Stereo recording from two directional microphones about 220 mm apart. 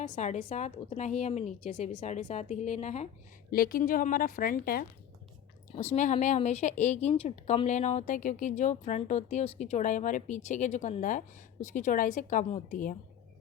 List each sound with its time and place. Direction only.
0.2 s a woman's voice: 30° left (ahead or behind)
3.5 s a woman's voice: 40° left (ahead or behind)
5.7 s a woman's voice: 30° left (ahead or behind)